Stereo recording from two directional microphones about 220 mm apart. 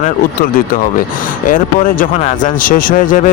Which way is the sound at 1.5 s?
40° left (ahead or behind).